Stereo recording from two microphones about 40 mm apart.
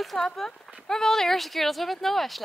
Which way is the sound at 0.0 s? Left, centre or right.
Centre.